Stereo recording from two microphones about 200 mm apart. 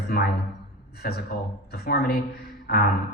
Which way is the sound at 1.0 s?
50° left (ahead or behind).